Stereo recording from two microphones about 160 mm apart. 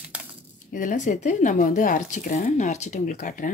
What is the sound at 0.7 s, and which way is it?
Speech, 55° left (ahead or behind).